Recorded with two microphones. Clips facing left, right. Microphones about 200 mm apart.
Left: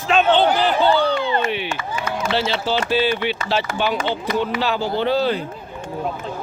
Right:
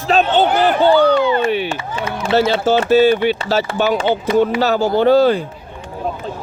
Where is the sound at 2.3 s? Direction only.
50° right (ahead or behind).